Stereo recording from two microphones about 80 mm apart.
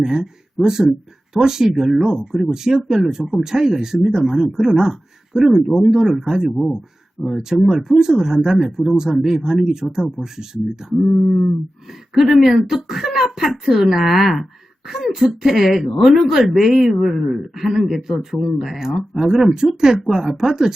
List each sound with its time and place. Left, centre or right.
0.0 s speech: centre
12.1 s speech: centre